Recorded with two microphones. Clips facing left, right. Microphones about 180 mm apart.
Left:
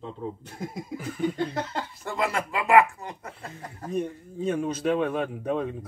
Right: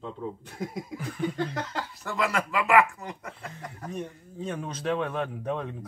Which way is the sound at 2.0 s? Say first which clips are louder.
Even; 25° left (ahead or behind).